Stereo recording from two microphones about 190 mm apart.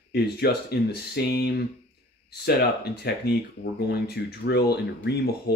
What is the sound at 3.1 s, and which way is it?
Speech, 60° left (ahead or behind).